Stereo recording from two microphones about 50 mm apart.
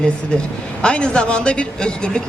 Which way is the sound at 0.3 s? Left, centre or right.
Centre.